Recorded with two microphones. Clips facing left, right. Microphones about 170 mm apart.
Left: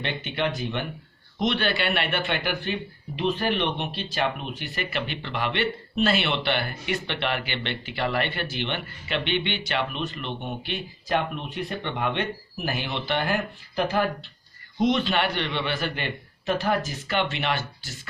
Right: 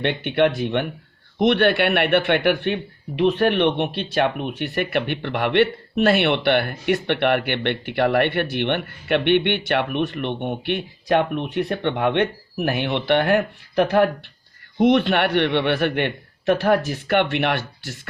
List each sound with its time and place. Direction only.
0.0 s a man's voice: 60° right (ahead or behind)